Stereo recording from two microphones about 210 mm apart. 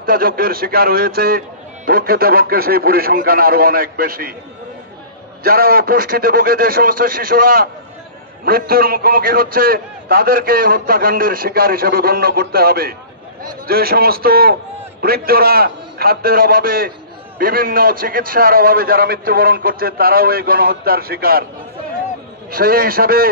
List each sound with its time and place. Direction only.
0.0 s a man's voice: 45° right (ahead or behind)
5.4 s a man's voice: 45° right (ahead or behind)
22.5 s a man's voice: 45° right (ahead or behind)